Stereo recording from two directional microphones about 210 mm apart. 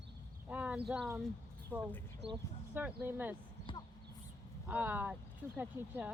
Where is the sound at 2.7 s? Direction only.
10° right (ahead or behind).